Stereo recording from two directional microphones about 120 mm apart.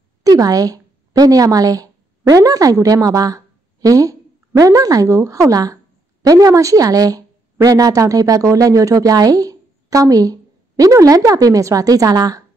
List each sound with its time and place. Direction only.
0.2 s a woman's voice: 30° right (ahead or behind)